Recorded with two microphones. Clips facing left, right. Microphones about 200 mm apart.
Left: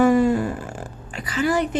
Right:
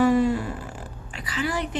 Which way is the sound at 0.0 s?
50° left (ahead or behind).